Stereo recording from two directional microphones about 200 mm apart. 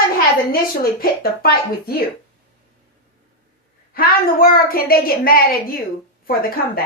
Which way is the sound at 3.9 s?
45° left (ahead or behind).